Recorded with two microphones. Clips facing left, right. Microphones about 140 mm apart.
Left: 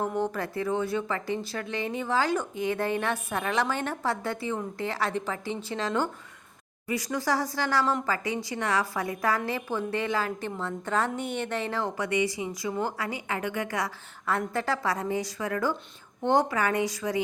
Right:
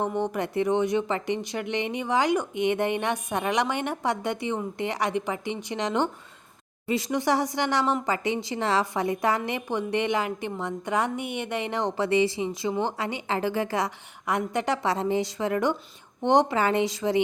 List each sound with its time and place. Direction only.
0.0 s a woman's voice: 20° right (ahead or behind)